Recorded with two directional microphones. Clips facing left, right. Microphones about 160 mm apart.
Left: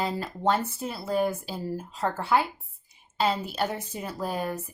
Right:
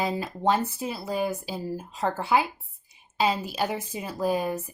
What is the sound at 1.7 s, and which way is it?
A woman's voice, 15° right (ahead or behind).